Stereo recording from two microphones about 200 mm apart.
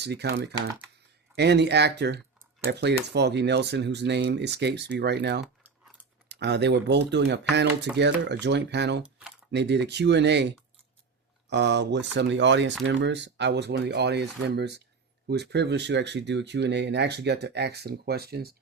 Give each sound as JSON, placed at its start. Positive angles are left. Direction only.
{"t": 0.0, "sound": "speech", "side_deg": -55}
{"t": 9.0, "sound": "cutlery", "side_deg": -5}
{"t": 9.5, "sound": "speech", "side_deg": -60}